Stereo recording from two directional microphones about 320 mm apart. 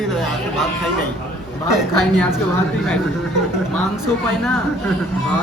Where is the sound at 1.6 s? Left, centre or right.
Centre.